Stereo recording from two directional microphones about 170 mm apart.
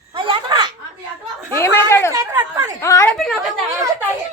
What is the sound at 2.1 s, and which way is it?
Speech, 20° right (ahead or behind).